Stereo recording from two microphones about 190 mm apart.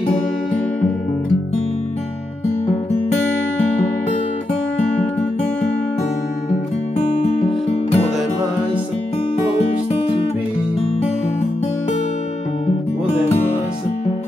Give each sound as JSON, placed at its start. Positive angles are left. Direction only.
{"t": 7.3, "sound": "music", "side_deg": 35}